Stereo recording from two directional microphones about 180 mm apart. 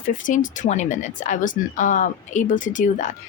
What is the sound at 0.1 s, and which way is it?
A woman's voice, 45° left (ahead or behind).